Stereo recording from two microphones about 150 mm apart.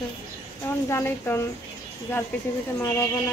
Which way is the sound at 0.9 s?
15° left (ahead or behind).